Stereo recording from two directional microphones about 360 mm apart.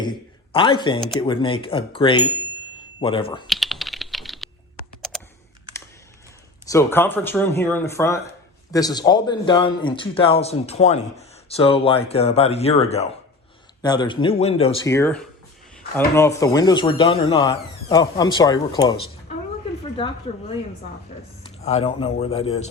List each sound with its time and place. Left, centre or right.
0.5 s a man's voice: centre
3.4 s typing: centre
6.7 s a man's voice: centre
20.3 s a man's voice: centre
21.4 s speech: centre